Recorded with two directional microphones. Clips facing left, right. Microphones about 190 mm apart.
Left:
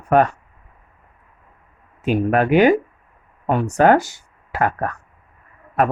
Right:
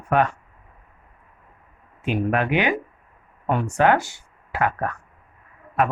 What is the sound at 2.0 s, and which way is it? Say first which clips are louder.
Speech: left 5 dB; 40° left (ahead or behind).